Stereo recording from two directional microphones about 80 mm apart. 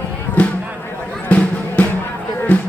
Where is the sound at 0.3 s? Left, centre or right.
Centre.